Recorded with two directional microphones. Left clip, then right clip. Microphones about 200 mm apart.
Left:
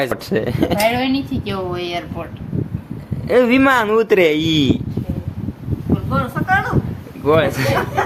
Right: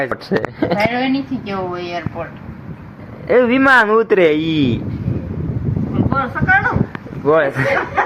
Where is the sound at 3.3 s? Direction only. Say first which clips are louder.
Right 1 dB; centre (ahead or behind).